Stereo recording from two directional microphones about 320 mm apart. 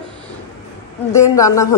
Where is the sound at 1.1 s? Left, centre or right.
Centre.